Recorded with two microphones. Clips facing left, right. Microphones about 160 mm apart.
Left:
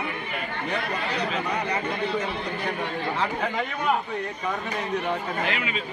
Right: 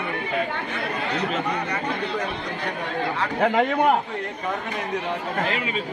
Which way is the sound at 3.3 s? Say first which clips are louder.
Right 8 dB; 65° right (ahead or behind).